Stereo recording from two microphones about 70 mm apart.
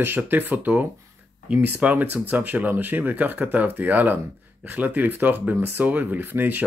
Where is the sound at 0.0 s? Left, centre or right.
Right.